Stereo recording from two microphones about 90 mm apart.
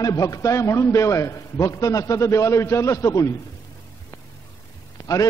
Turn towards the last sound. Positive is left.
turn(degrees=40)  # may be behind; listen again after turning